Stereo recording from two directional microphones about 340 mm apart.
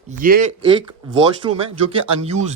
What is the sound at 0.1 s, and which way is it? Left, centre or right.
Speech, right.